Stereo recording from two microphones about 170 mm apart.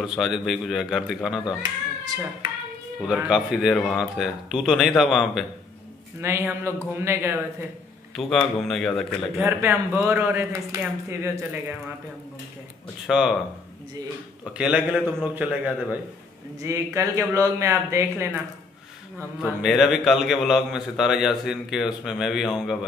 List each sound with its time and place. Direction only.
0.0 s a man's voice: 5° right (ahead or behind)
3.0 s a man's voice: 5° right (ahead or behind)
6.2 s speech: 15° right (ahead or behind)
8.2 s a man's voice: centre (ahead or behind)
9.5 s speech: 10° right (ahead or behind)
13.0 s a man's voice: centre (ahead or behind)
14.4 s speech: 5° right (ahead or behind)
19.4 s a man's voice: centre (ahead or behind)